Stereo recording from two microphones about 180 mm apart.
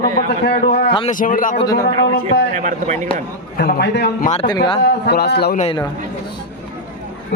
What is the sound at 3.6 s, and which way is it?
A man's voice, 60° left (ahead or behind).